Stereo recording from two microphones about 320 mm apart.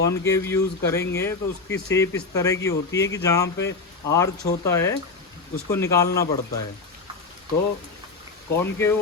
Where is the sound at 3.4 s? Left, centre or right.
Left.